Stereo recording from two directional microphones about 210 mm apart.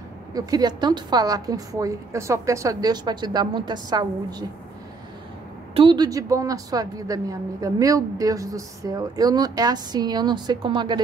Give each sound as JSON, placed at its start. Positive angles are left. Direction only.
{"t": 0.3, "sound": "a woman's voice", "side_deg": -15}
{"t": 5.8, "sound": "a woman's voice", "side_deg": -20}